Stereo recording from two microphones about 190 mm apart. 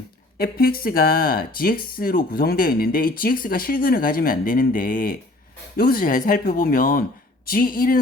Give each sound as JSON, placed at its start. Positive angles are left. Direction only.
{"t": 0.3, "sound": "speech", "side_deg": 50}